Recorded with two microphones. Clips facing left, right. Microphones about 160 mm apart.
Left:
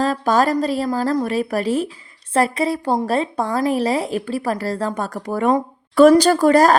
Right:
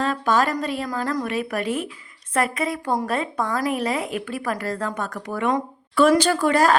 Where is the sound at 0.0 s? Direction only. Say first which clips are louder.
Left 4 dB; 35° left (ahead or behind).